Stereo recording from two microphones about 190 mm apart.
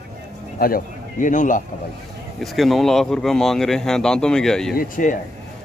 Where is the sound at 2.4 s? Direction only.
Centre (ahead or behind).